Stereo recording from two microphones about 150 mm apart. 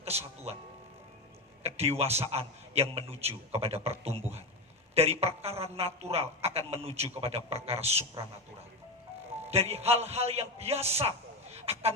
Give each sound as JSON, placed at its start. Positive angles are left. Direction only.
{"t": 0.1, "sound": "a man's voice", "side_deg": -45}
{"t": 1.6, "sound": "a man's voice", "side_deg": -45}
{"t": 9.5, "sound": "a man's voice", "side_deg": -45}